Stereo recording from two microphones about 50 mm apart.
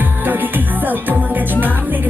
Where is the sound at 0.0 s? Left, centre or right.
Right.